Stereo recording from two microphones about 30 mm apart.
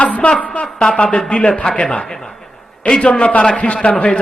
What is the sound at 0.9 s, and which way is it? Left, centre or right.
Speech, left.